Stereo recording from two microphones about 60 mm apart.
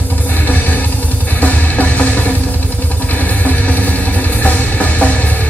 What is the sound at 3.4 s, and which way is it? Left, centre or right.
Music, left.